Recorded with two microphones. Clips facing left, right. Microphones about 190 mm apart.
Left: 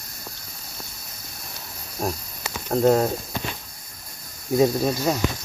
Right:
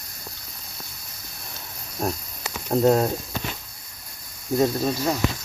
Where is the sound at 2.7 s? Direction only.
Centre (ahead or behind).